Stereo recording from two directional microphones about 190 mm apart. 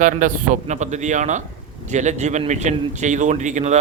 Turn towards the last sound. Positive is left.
turn(degrees=-40)  # may be behind; listen again after turning